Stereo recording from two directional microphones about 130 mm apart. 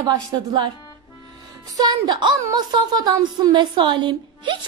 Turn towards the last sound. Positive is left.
turn(degrees=-35)  # may be behind; listen again after turning